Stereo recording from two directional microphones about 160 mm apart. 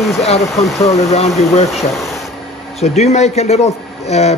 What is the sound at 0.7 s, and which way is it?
Speech, 20° left (ahead or behind).